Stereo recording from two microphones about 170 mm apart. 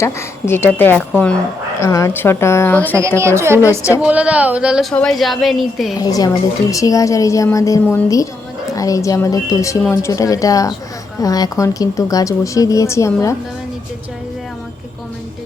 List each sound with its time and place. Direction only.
0.0 s speech: 15° left (ahead or behind)
3.2 s a woman's voice: 15° right (ahead or behind); by 5.9 s centre (ahead or behind)
6.0 s a woman's voice: 20° left (ahead or behind)